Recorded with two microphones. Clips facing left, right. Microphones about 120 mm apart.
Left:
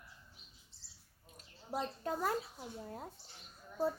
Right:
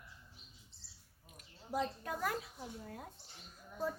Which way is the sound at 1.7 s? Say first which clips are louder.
Even; 30° left (ahead or behind).